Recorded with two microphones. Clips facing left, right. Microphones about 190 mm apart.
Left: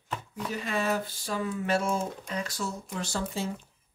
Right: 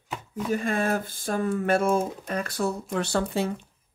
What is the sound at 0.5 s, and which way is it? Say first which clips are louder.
Speech: right 3 dB; 50° right (ahead or behind).